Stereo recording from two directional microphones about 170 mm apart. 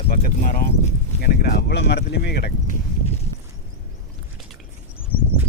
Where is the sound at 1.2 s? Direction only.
70° left (ahead or behind).